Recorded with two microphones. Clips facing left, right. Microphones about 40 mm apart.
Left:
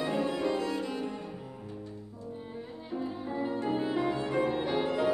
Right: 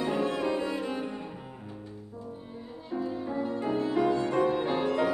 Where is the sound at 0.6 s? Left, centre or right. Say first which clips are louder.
Right 1 dB; right.